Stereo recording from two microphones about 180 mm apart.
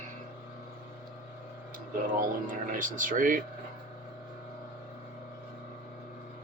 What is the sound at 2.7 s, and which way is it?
Speech, 45° right (ahead or behind).